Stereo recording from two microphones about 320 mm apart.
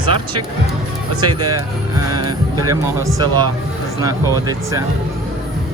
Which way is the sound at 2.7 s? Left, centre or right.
Centre.